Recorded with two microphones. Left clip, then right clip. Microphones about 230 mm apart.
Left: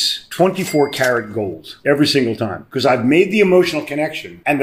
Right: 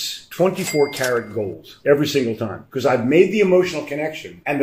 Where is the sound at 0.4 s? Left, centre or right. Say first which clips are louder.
Left 2 dB; left.